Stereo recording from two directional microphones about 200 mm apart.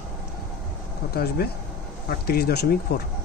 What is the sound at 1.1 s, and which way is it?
Speech, 50° left (ahead or behind).